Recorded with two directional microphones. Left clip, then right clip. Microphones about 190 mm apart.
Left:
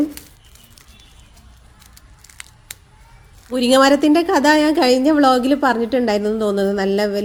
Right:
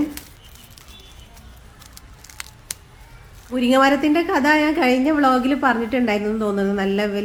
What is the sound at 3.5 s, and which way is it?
A woman's voice, 45° left (ahead or behind).